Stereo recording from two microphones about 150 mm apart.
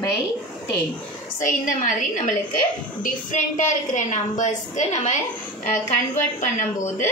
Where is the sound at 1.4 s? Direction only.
60° left (ahead or behind).